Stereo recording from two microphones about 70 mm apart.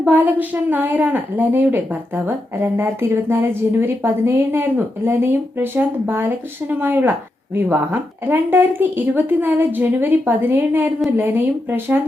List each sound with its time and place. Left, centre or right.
0.0 s a woman's voice: right